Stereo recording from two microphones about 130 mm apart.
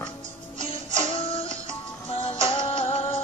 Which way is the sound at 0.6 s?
40° left (ahead or behind).